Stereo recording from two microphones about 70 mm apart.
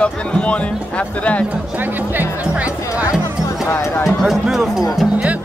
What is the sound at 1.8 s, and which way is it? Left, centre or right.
Music, right.